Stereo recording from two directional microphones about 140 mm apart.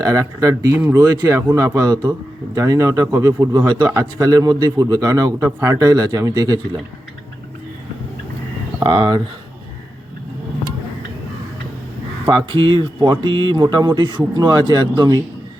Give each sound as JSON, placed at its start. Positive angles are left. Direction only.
{"t": 0.0, "sound": "speech", "side_deg": -25}
{"t": 1.9, "sound": "speech", "side_deg": -30}
{"t": 8.8, "sound": "speech", "side_deg": -35}
{"t": 12.2, "sound": "speech", "side_deg": -15}
{"t": 12.5, "sound": "speech", "side_deg": -35}